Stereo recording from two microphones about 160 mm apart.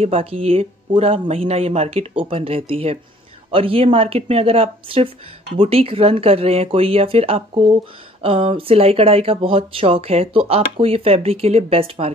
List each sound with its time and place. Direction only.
0.0 s speech: 40° right (ahead or behind)